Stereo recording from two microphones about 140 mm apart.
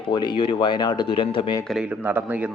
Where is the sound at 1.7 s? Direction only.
5° right (ahead or behind).